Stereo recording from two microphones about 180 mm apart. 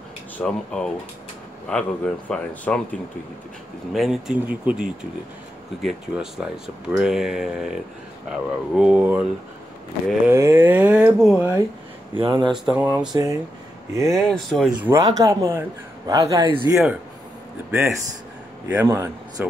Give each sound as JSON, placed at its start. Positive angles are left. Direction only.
{"t": 0.4, "sound": "speech", "side_deg": 5}
{"t": 3.9, "sound": "speech", "side_deg": 0}
{"t": 10.3, "sound": "speech", "side_deg": -15}
{"t": 12.2, "sound": "a man's voice", "side_deg": -25}
{"t": 12.5, "sound": "speech", "side_deg": -5}
{"t": 14.1, "sound": "speech", "side_deg": 0}
{"t": 14.9, "sound": "a man's voice", "side_deg": -20}
{"t": 17.6, "sound": "speech", "side_deg": -15}